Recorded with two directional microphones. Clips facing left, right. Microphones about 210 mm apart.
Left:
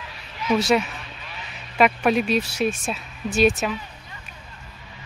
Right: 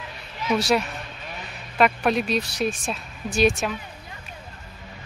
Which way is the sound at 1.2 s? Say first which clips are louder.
Right 3 dB; 45° right (ahead or behind).